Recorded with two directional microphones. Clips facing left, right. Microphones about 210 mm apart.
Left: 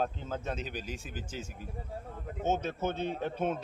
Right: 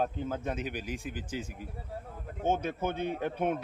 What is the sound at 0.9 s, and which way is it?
Speech, 55° right (ahead or behind).